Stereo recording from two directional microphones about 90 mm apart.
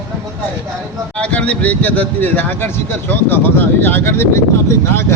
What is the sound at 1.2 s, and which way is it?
A man's voice, 15° left (ahead or behind).